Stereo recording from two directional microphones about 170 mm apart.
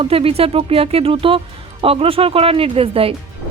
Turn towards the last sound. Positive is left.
turn(degrees=-35)  # may be behind; listen again after turning